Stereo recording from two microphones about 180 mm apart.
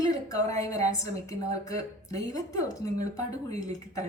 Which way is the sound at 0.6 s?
20° left (ahead or behind).